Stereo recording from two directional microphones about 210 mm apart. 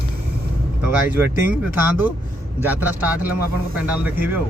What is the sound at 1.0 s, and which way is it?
Speech, 10° right (ahead or behind).